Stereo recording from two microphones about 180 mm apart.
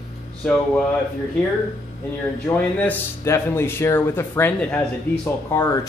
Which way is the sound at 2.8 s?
10° left (ahead or behind).